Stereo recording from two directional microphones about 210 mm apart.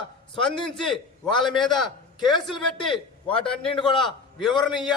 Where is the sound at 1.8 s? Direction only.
20° left (ahead or behind).